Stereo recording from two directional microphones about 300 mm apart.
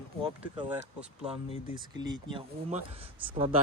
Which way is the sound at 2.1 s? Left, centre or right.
Centre.